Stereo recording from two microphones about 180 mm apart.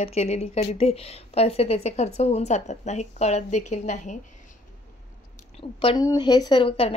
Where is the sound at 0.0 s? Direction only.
35° left (ahead or behind).